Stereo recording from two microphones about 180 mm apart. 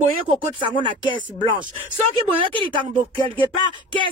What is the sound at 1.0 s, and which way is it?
Speech, 25° right (ahead or behind).